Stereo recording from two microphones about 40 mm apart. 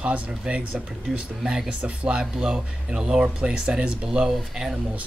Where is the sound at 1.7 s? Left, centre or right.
Right.